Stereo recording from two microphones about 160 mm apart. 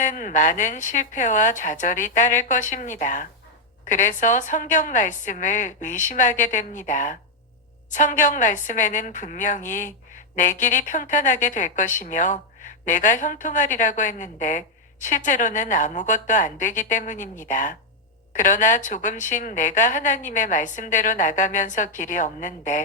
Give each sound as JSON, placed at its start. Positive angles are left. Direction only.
{"t": 0.0, "sound": "a woman's voice", "side_deg": 50}